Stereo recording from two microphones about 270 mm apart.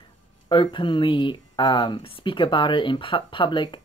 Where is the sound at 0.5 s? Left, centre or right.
Centre.